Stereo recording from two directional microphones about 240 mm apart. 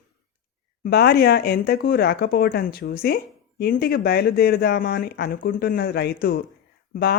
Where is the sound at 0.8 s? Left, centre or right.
Left.